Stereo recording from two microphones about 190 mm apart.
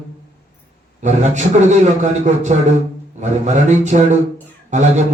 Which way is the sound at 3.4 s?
40° right (ahead or behind).